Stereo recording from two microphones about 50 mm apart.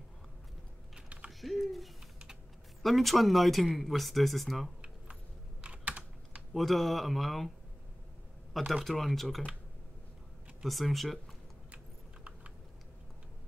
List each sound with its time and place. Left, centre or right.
1.0 s typing: right
1.4 s a sound: centre
2.8 s speech: centre
5.6 s computer keyboard: right
6.5 s speech: centre
8.8 s speech: centre
10.6 s speech: centre